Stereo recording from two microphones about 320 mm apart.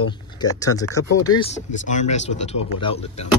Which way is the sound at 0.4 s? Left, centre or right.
Centre.